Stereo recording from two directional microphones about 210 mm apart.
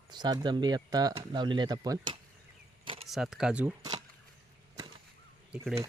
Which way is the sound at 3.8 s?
20° right (ahead or behind).